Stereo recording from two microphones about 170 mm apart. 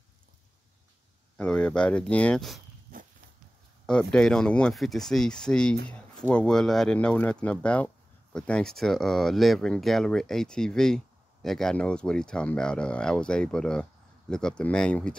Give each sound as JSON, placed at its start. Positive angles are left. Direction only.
{"t": 1.4, "sound": "speech", "side_deg": 5}
{"t": 2.9, "sound": "dog", "side_deg": -50}
{"t": 3.8, "sound": "speech", "side_deg": 5}